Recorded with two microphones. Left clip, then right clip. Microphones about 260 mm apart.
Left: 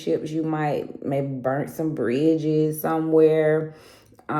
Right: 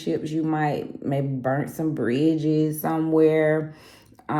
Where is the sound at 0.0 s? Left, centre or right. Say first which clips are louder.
Left 1 dB; right.